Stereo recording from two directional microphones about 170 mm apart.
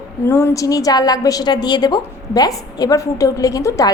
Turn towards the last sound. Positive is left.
turn(degrees=20)  # may be behind; listen again after turning